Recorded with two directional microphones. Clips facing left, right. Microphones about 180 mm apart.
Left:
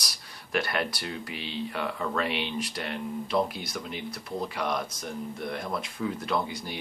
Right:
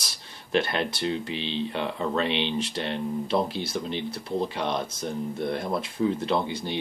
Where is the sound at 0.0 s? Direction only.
25° right (ahead or behind).